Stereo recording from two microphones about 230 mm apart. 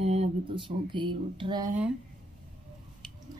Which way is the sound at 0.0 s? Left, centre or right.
Right.